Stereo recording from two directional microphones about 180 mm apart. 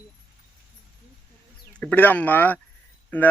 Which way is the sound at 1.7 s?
5° left (ahead or behind).